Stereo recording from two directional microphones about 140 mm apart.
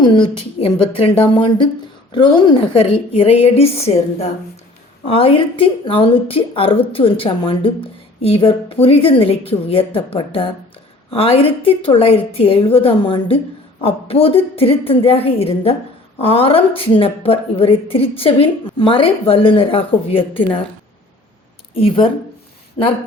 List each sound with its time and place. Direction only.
0.0 s a woman's voice: 35° left (ahead or behind)
21.8 s speech: 40° left (ahead or behind)